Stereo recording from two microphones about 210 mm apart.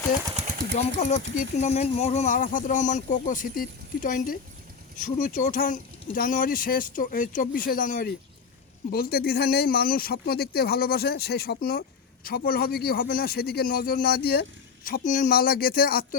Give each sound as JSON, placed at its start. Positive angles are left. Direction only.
{"t": 0.9, "sound": "speech", "side_deg": 35}